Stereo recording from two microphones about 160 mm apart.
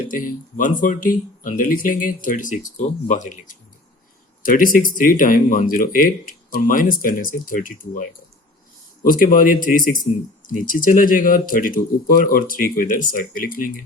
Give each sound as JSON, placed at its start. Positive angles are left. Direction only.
{"t": 0.1, "sound": "speech", "side_deg": 60}
{"t": 9.0, "sound": "speech", "side_deg": 60}